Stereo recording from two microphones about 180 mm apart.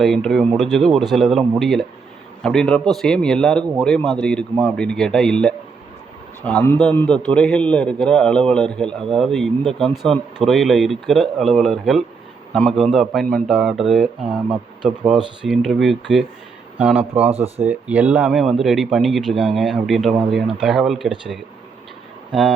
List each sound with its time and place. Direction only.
0.0 s a man's voice: centre (ahead or behind)
17.3 s speech: 35° right (ahead or behind)
17.7 s speech: 10° right (ahead or behind)